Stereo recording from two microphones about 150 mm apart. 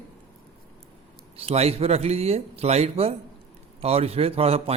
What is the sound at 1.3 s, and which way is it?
A man's voice, 40° right (ahead or behind).